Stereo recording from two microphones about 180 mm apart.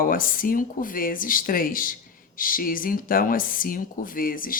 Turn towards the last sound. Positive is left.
turn(degrees=50)  # may be behind; listen again after turning